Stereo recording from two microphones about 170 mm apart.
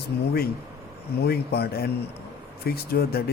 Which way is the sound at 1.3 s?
70° left (ahead or behind).